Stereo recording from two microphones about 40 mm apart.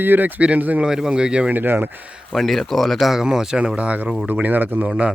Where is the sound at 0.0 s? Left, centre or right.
Right.